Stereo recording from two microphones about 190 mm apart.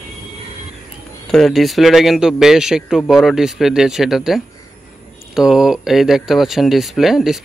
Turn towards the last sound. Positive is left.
turn(degrees=0)  # may be behind; listen again after turning